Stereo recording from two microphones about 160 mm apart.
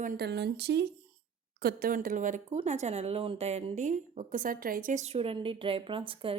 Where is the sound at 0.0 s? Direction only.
75° right (ahead or behind); by 0.9 s 90° right.